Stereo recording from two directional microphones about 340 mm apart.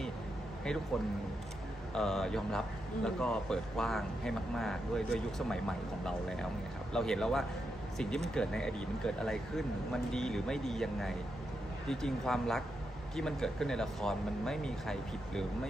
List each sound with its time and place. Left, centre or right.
1.9 s speech: centre